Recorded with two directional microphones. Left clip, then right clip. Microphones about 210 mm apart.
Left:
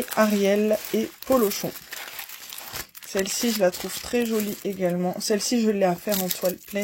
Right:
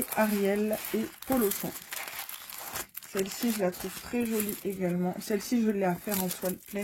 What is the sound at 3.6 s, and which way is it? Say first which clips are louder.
Speech: left 9 dB; 40° left (ahead or behind).